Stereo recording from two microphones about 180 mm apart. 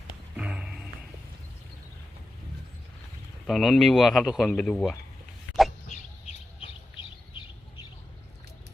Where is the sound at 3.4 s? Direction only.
Centre (ahead or behind).